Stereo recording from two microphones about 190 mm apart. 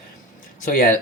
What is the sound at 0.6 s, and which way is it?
Speech, 45° left (ahead or behind).